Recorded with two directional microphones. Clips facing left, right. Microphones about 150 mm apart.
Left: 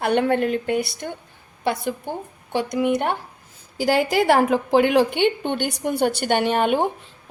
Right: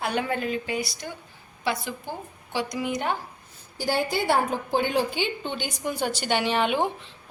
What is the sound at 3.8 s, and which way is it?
A woman's voice, 90° left.